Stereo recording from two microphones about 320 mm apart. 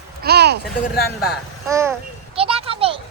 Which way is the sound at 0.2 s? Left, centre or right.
Right.